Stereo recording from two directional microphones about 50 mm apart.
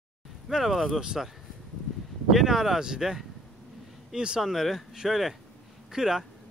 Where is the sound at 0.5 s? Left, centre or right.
Centre.